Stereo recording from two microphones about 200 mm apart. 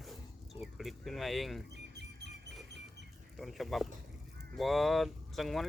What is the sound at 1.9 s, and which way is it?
Music, 60° right (ahead or behind).